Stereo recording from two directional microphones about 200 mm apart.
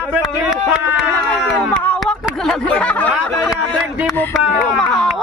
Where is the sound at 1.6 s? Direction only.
5° left (ahead or behind).